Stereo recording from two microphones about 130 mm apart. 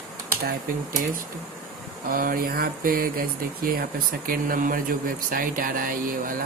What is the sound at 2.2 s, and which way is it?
Speech, 90° right.